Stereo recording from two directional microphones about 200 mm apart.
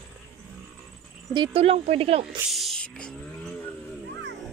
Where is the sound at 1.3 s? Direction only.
30° right (ahead or behind).